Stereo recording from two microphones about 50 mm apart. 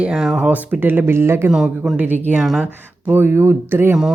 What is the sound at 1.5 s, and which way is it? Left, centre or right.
Speech, centre.